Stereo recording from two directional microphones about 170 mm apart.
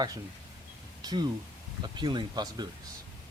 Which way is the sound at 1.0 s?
25° right (ahead or behind).